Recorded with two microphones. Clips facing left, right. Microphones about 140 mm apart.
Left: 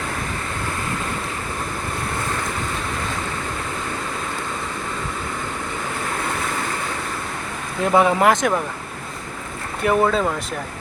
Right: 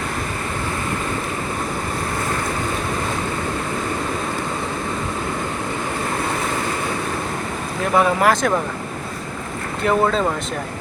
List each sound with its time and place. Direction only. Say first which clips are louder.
7.9 s speech: left 1 dB; 20° left (ahead or behind)
9.8 s speech: even; 5° left (ahead or behind)